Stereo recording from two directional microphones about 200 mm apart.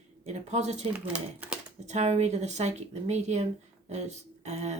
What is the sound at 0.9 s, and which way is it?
Speech, 5° right (ahead or behind).